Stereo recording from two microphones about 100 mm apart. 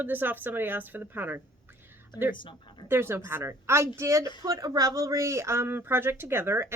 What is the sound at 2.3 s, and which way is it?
Speech, 50° left (ahead or behind).